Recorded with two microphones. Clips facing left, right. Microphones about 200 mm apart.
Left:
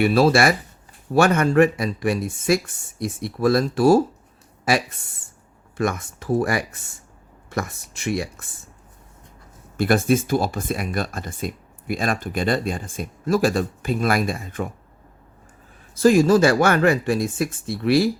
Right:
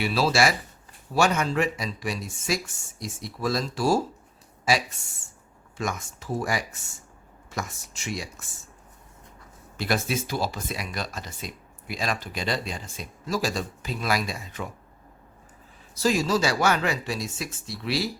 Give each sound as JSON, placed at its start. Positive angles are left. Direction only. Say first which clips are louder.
{"t": 0.0, "sound": "speech", "louder": "left 7 dB", "side_deg": 55}
{"t": 9.7, "sound": "speech", "louder": "left 9 dB", "side_deg": 50}
{"t": 16.0, "sound": "speech", "louder": "left 9 dB", "side_deg": 55}